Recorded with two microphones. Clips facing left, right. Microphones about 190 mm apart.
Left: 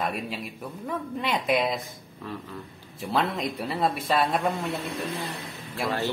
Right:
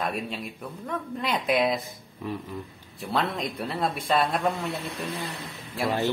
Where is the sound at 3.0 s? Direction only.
Centre (ahead or behind).